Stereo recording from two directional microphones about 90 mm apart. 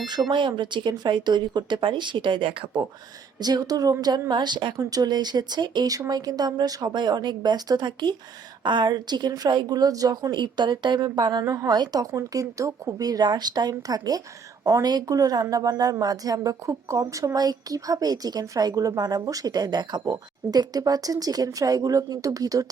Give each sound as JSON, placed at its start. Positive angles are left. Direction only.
{"t": 0.0, "sound": "speech", "side_deg": -55}
{"t": 3.4, "sound": "a woman's voice", "side_deg": -45}
{"t": 4.3, "sound": "speech", "side_deg": -55}
{"t": 4.8, "sound": "a woman's voice", "side_deg": -45}
{"t": 6.9, "sound": "a woman's voice", "side_deg": -55}
{"t": 11.4, "sound": "a woman's voice", "side_deg": -35}
{"t": 11.7, "sound": "a woman's voice", "side_deg": -45}